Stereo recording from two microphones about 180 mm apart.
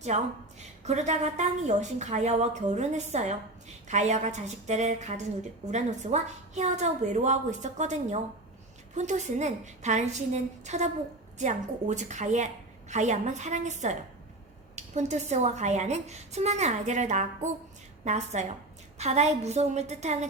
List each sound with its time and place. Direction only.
0.1 s a woman's voice: 40° right (ahead or behind)